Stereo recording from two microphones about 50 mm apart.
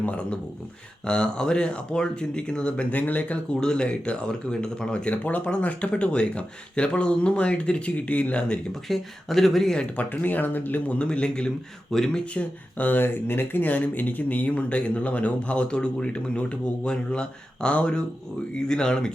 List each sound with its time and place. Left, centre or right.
0.0 s speech: left
3.6 s speech: centre
5.1 s speech: left
8.9 s speech: centre
10.0 s speech: left
10.9 s speech: left
12.3 s speech: left
13.0 s speech: left; by 19.1 s centre